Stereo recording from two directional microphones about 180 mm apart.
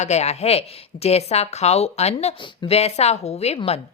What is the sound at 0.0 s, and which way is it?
Speech, 40° left (ahead or behind).